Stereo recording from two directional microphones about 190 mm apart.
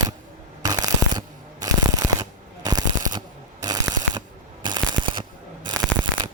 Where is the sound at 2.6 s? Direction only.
20° right (ahead or behind).